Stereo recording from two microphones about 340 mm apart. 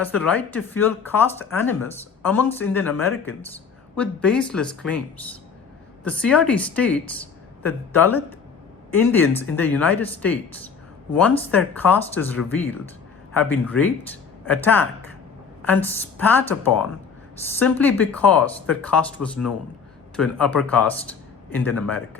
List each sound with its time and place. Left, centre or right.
0.0 s speech: centre
6.1 s speech: centre